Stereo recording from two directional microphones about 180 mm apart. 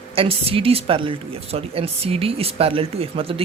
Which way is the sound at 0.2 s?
30° right (ahead or behind).